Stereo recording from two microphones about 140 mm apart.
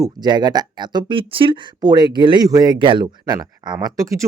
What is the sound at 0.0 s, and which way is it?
Speech, 30° right (ahead or behind).